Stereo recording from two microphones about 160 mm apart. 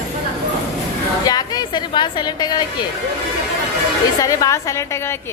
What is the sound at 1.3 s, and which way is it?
A woman's voice, 25° left (ahead or behind).